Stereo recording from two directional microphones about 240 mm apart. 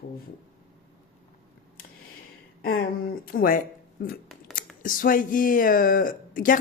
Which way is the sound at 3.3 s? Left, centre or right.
Left.